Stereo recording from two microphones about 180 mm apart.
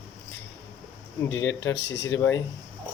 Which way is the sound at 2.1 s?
15° left (ahead or behind).